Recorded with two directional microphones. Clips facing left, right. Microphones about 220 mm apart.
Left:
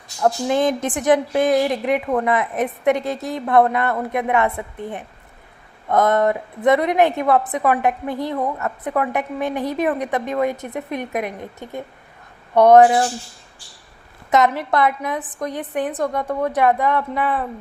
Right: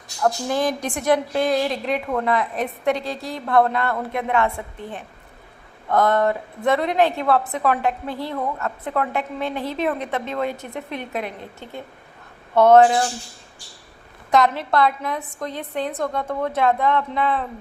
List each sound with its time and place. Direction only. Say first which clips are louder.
0.2 s a woman's voice: left 3 dB; 20° left (ahead or behind)
14.3 s a woman's voice: left 1 dB; 20° left (ahead or behind)